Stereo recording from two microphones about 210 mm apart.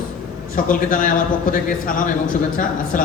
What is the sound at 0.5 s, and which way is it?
A man's voice, 40° left (ahead or behind).